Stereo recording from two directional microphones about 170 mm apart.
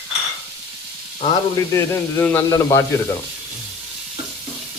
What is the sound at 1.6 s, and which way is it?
Speech, 15° left (ahead or behind).